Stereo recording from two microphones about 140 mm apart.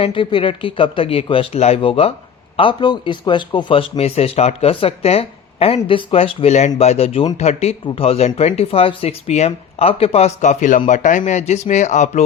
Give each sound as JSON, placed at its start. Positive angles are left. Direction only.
{"t": 0.0, "sound": "a man's voice", "side_deg": 35}